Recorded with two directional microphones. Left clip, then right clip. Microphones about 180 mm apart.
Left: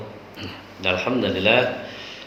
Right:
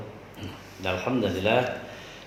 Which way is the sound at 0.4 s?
50° right (ahead or behind).